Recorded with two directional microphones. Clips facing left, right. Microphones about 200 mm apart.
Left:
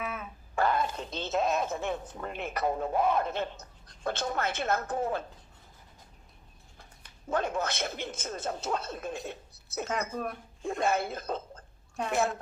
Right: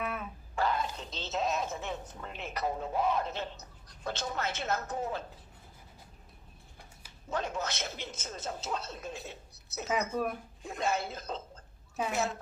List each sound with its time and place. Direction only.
0.0 s a sound: centre (ahead or behind)
0.5 s speech: 55° left (ahead or behind)
7.3 s a man's voice: 55° left (ahead or behind)
10.6 s a man's voice: 50° left (ahead or behind)